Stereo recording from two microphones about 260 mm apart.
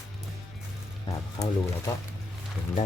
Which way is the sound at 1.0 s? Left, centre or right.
Centre.